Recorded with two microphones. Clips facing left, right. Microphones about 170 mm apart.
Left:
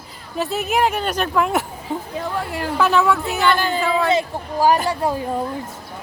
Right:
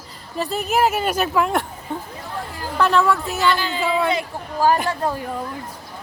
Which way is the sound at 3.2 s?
65° left (ahead or behind).